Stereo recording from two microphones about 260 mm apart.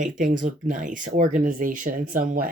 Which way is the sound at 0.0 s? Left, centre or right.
Right.